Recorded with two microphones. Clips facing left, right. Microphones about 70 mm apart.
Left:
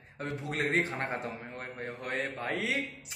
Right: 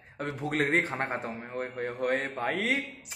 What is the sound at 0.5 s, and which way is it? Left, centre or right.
A man's voice, right.